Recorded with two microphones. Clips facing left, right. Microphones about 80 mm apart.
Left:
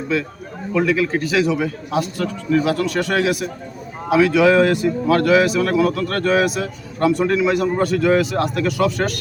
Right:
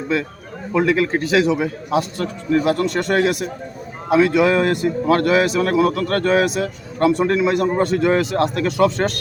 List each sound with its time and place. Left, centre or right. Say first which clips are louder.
0.7 s a man's voice: right 1 dB; right